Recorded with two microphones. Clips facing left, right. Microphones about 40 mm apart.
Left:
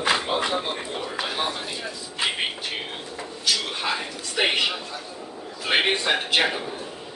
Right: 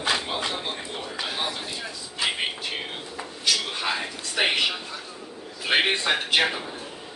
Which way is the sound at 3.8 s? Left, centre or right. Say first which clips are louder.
Left 1 dB; centre.